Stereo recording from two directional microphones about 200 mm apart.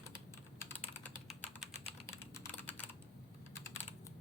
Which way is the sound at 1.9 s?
10° left (ahead or behind).